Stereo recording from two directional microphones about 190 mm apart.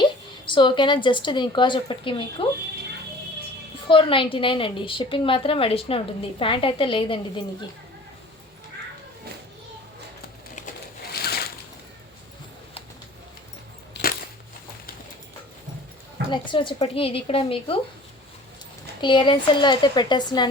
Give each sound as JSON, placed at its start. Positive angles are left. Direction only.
{"t": 0.0, "sound": "a woman's voice", "side_deg": 25}
{"t": 3.8, "sound": "a woman's voice", "side_deg": 25}
{"t": 10.5, "sound": "a sound", "side_deg": 50}
{"t": 14.0, "sound": "a sound", "side_deg": 70}
{"t": 16.3, "sound": "a woman's voice", "side_deg": 25}
{"t": 19.0, "sound": "a woman's voice", "side_deg": 25}